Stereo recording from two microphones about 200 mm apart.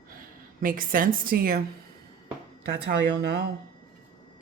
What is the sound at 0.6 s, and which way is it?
A woman's voice, 45° right (ahead or behind).